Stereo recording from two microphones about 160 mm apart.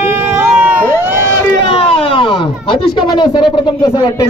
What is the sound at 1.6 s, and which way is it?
Speech, 35° left (ahead or behind).